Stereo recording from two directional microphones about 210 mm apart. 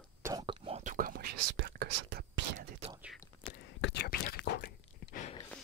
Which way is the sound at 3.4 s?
60° left (ahead or behind).